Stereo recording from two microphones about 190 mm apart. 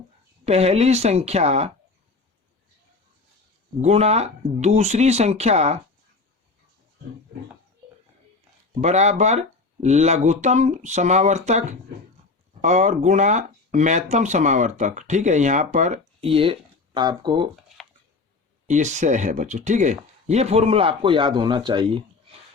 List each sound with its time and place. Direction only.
0.4 s speech: 35° right (ahead or behind)
3.8 s speech: 35° right (ahead or behind)
8.8 s speech: 35° right (ahead or behind)
18.7 s speech: 40° right (ahead or behind)